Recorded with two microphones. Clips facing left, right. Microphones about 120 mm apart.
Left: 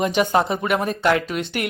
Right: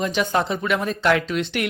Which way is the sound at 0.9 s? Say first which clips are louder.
Even; 5° left (ahead or behind).